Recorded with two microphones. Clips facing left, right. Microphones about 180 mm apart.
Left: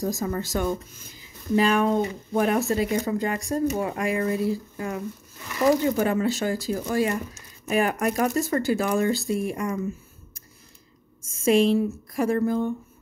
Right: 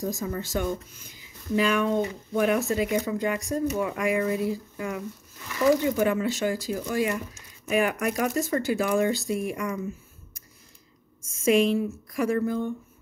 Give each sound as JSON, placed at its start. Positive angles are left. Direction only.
{"t": 0.0, "sound": "speech", "side_deg": 40}
{"t": 11.4, "sound": "speech", "side_deg": 35}